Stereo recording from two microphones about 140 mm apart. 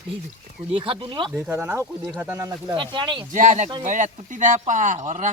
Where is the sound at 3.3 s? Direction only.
60° right (ahead or behind).